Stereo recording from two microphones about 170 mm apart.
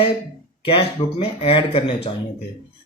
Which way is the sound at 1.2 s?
35° left (ahead or behind).